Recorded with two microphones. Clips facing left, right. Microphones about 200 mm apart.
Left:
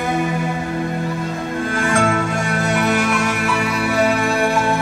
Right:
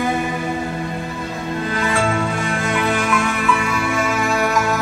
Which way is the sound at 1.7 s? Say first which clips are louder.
Left 2 dB; 45° left (ahead or behind).